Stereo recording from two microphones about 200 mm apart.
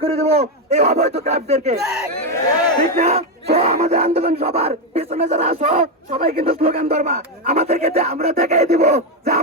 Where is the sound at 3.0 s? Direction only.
30° right (ahead or behind).